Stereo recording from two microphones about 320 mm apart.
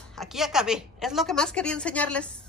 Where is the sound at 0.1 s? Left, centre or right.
Centre.